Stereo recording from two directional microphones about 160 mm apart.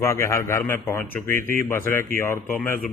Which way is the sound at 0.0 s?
15° left (ahead or behind).